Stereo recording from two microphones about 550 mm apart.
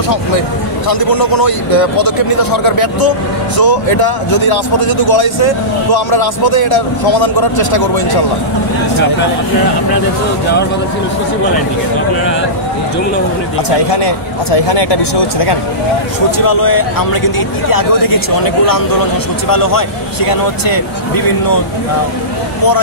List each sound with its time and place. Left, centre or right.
0.8 s a man's voice: left
14.0 s speech: left
16.3 s a man's voice: left